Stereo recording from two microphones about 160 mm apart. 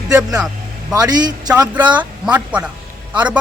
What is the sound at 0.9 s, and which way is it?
Speech, 25° right (ahead or behind).